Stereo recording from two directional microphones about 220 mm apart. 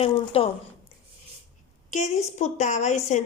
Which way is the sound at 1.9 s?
35° left (ahead or behind).